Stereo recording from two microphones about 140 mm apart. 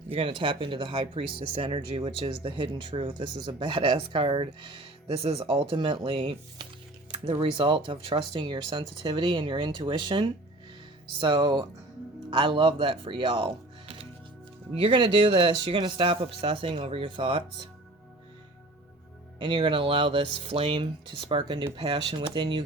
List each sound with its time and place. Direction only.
0.1 s speech: 40° right (ahead or behind)
19.4 s speech: 35° right (ahead or behind)